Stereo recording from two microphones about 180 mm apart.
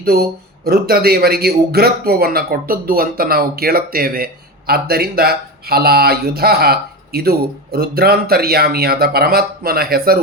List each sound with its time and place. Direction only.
0.0 s speech: 55° right (ahead or behind)